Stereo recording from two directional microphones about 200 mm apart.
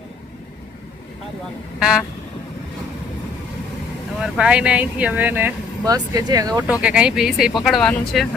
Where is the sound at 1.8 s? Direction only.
5° right (ahead or behind).